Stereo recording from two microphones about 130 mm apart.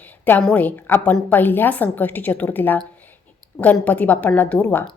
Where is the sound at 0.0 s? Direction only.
10° left (ahead or behind).